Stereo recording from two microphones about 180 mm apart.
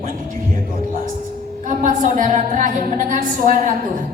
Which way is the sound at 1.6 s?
45° right (ahead or behind).